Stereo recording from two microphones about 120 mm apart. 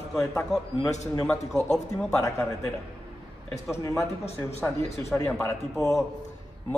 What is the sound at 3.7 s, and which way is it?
Speech, 25° left (ahead or behind).